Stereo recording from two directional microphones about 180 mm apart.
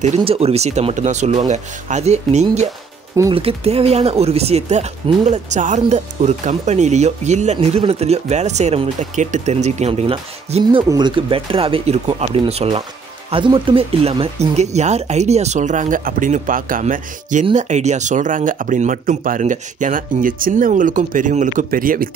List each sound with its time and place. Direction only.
0.0 s speech: 35° right (ahead or behind); by 22.1 s 50° right (ahead or behind)